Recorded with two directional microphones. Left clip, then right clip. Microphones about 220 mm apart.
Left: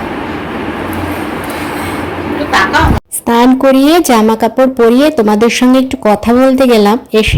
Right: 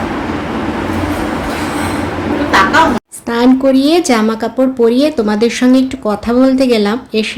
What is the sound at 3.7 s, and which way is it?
A woman's voice, 30° left (ahead or behind).